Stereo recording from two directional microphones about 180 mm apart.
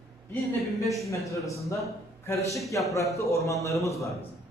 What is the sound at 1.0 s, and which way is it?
Speech, 15° left (ahead or behind).